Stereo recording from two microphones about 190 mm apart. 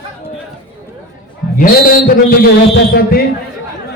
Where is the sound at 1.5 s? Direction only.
45° left (ahead or behind).